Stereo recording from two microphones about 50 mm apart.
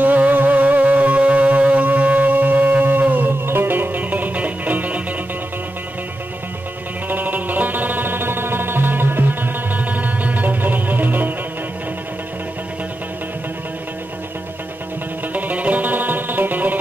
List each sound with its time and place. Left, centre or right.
0.0 s music: right
7.1 s music: right
15.3 s music: right